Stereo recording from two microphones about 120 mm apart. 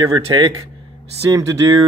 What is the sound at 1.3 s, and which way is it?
Speech, 30° right (ahead or behind).